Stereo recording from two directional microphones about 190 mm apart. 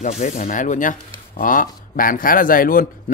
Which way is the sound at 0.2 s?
40° left (ahead or behind).